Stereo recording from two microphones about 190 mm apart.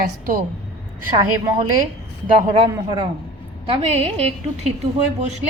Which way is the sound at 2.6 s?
20° right (ahead or behind).